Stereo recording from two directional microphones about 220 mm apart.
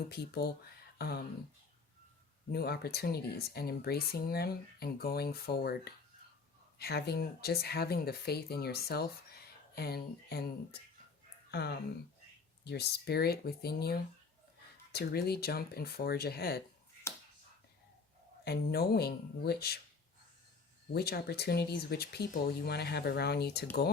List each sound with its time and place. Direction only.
0.1 s speech: 45° left (ahead or behind)
0.9 s a sound: 45° left (ahead or behind)
2.5 s speech: 45° left (ahead or behind)
18.4 s speech: 45° left (ahead or behind)
20.9 s speech: 45° left (ahead or behind)